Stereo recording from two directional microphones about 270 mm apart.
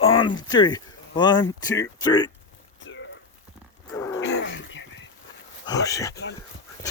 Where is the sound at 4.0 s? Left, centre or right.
Centre.